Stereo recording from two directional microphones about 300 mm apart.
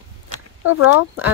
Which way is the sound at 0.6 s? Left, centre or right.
Left.